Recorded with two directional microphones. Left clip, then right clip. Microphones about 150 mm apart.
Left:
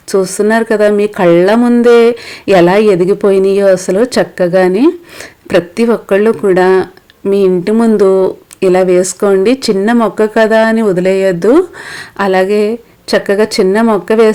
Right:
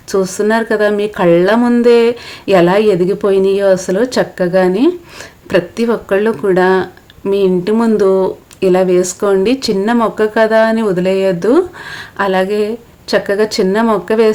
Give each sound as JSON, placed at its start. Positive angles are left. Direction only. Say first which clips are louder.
{"t": 0.1, "sound": "speech", "louder": "left 3 dB", "side_deg": 30}